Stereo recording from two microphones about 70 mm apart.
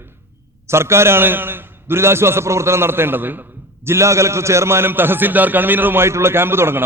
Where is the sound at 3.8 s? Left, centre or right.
Right.